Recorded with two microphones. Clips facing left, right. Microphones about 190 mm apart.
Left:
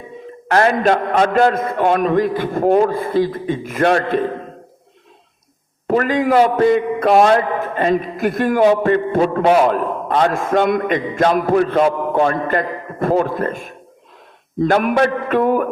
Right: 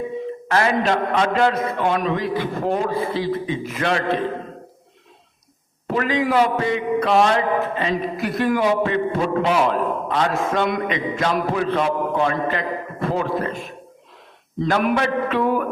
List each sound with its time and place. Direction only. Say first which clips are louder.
0.5 s a man's voice: left 5 dB; 50° left (ahead or behind)
5.9 s a man's voice: left 5 dB; 50° left (ahead or behind)